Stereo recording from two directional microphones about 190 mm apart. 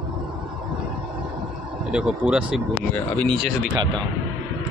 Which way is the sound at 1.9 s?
5° right (ahead or behind).